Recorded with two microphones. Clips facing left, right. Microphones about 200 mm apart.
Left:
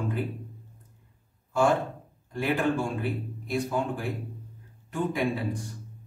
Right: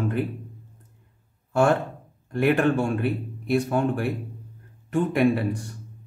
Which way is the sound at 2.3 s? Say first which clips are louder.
Right 6 dB; 65° right (ahead or behind).